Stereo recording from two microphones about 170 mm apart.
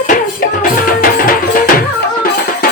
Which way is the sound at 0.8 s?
55° left (ahead or behind).